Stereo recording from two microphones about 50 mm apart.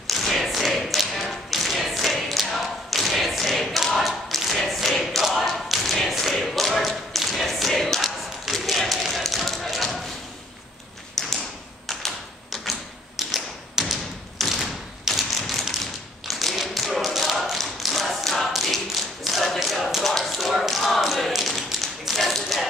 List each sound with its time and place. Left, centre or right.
0.1 s tap: centre
11.2 s tap: centre